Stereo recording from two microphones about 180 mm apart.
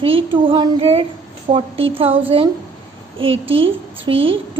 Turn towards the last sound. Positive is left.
turn(degrees=-30)  # may be behind; listen again after turning